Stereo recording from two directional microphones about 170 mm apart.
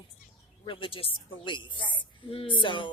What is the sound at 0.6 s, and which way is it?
Speech, 30° left (ahead or behind).